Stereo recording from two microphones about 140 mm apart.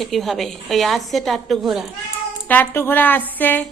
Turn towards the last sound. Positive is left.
turn(degrees=15)  # may be behind; listen again after turning